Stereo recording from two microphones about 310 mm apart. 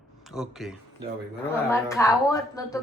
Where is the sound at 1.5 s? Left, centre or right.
Centre.